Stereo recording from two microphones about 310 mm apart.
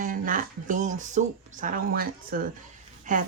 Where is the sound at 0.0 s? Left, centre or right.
Right.